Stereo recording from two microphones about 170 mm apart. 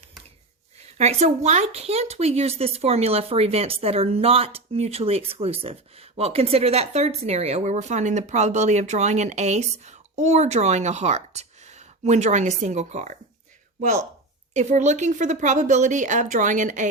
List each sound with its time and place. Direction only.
0.8 s speech: 40° right (ahead or behind)
14.5 s speech: 45° right (ahead or behind)